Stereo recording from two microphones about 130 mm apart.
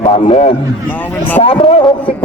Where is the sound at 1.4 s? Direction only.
45° left (ahead or behind).